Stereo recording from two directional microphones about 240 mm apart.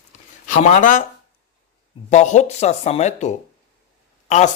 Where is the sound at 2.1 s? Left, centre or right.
Left.